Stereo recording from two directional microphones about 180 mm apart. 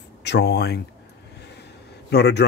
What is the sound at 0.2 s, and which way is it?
Speech, 70° left (ahead or behind).